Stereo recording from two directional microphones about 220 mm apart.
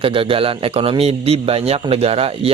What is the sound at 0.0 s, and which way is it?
A man's voice, 25° right (ahead or behind).